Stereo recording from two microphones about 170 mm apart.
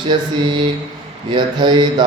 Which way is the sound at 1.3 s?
25° right (ahead or behind).